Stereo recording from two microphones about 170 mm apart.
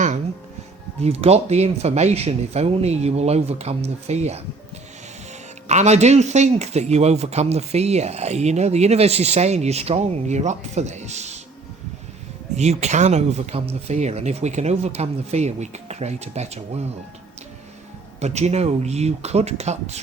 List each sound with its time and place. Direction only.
1.0 s speech: 35° right (ahead or behind)
5.6 s speech: 40° right (ahead or behind)
12.5 s speech: 40° right (ahead or behind)
18.2 s speech: 40° right (ahead or behind)